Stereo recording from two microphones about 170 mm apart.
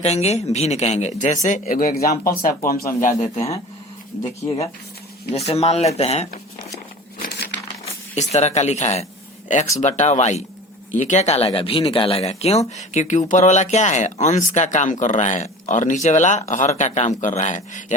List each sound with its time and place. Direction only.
0.0 s speech: 40° left (ahead or behind); by 3.1 s 60° left (ahead or behind)
3.2 s speech: 35° left (ahead or behind)
5.3 s speech: 40° left (ahead or behind)
7.2 s crumpling: 75° left (ahead or behind)
7.9 s speech: 40° left (ahead or behind)